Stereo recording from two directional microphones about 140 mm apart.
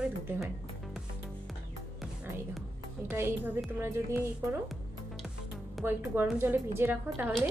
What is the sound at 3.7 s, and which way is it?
Speech, 15° right (ahead or behind).